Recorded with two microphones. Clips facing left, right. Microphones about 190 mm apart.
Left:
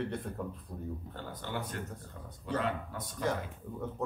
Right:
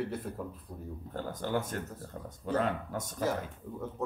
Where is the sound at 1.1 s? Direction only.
45° right (ahead or behind).